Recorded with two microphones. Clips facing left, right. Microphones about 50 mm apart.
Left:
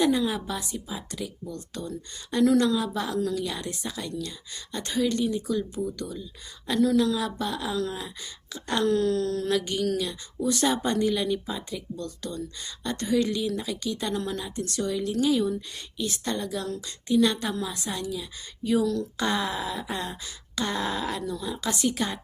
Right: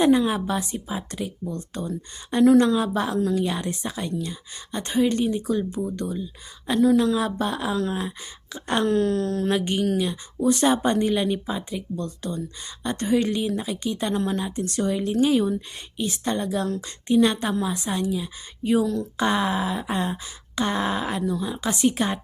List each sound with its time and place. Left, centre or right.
0.0 s a woman's voice: right